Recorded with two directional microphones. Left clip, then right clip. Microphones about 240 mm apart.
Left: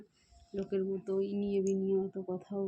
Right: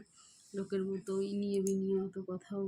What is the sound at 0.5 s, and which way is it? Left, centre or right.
Speech, right.